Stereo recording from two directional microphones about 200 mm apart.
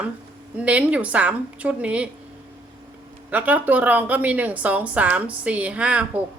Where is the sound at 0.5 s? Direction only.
5° right (ahead or behind).